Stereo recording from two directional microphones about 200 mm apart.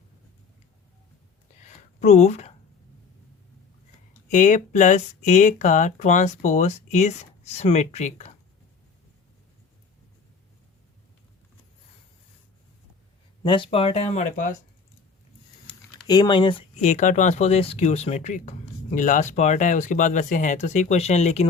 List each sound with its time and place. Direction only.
1.6 s a sound: 35° left (ahead or behind)
4.3 s speech: 40° left (ahead or behind)
13.4 s speech: 25° left (ahead or behind)
15.6 s typing: 20° left (ahead or behind)
16.8 s speech: 40° left (ahead or behind)